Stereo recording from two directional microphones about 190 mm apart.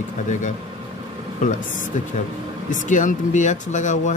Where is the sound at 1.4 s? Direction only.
40° left (ahead or behind).